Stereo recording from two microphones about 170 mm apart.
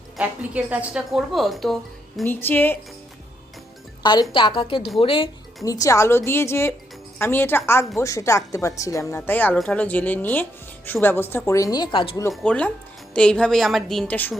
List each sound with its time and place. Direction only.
0.2 s a woman's voice: 10° right (ahead or behind)
2.2 s a woman's voice: 10° left (ahead or behind)
4.0 s a woman's voice: 25° left (ahead or behind)
5.6 s a woman's voice: 20° left (ahead or behind)
12.3 s a woman's voice: 5° left (ahead or behind)